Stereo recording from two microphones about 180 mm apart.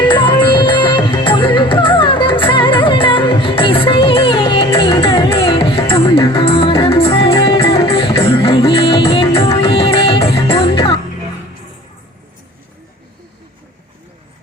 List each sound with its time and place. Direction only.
0.1 s music: 25° left (ahead or behind)